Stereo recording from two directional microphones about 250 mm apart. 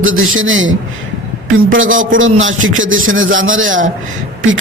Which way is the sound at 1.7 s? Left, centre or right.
Right.